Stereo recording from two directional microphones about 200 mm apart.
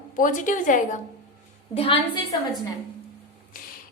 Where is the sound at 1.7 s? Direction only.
25° left (ahead or behind).